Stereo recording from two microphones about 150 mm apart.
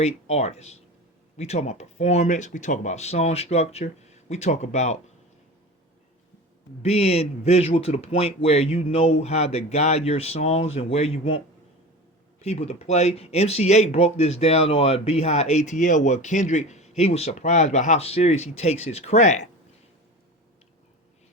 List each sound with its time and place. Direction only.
0.0 s speech: 45° left (ahead or behind)
6.8 s speech: 45° left (ahead or behind)